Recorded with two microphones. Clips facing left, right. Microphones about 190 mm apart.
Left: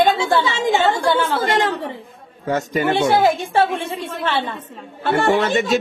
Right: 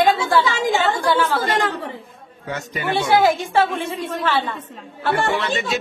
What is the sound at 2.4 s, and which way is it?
Speech, 45° left (ahead or behind).